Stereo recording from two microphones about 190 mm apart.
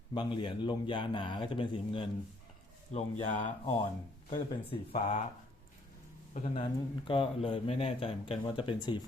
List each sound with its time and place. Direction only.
0.1 s speech: 25° left (ahead or behind)
2.9 s speech: 40° left (ahead or behind)
6.3 s speech: 35° left (ahead or behind)